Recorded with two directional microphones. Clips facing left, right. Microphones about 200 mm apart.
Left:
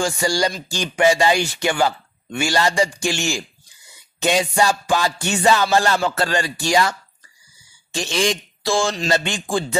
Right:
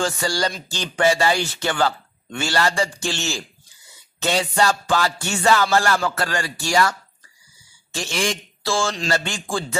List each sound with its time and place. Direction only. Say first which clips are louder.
0.0 s speech: left 3 dB; 15° left (ahead or behind)